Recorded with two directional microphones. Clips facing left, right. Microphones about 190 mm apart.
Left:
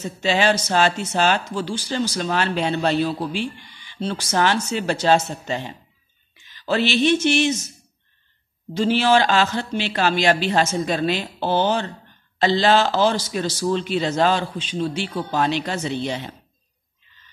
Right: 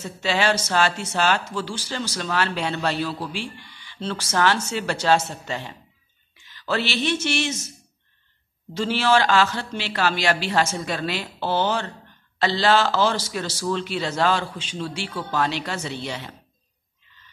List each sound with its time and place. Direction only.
0.0 s speech: 20° left (ahead or behind)
6.6 s a sound: 20° left (ahead or behind)
8.7 s speech: 15° left (ahead or behind)